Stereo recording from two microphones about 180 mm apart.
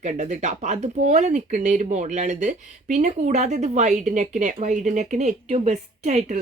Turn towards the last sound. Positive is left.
turn(degrees=-40)  # may be behind; listen again after turning